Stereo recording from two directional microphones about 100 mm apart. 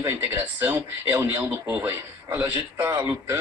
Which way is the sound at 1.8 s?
25° right (ahead or behind).